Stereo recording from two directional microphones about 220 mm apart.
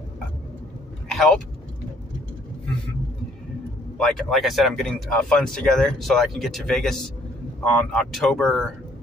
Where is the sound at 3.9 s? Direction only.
Centre (ahead or behind).